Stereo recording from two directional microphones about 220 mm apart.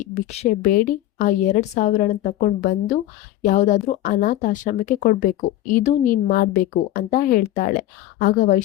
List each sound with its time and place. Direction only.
0.0 s a woman's voice: 30° left (ahead or behind)